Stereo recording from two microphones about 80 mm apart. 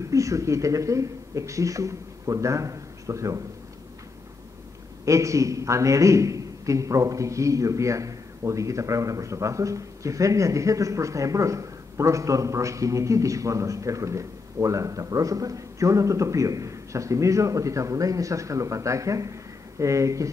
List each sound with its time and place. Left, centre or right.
0.1 s a man's voice: right
5.0 s a man's voice: right